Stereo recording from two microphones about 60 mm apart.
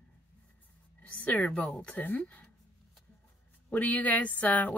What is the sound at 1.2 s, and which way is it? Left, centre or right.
A woman's voice, left.